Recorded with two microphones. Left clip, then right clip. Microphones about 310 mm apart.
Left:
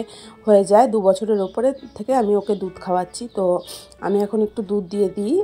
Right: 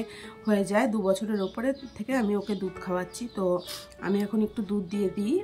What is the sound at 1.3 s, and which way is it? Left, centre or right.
Speech, left.